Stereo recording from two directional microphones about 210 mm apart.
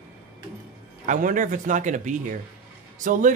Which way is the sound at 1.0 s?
40° right (ahead or behind).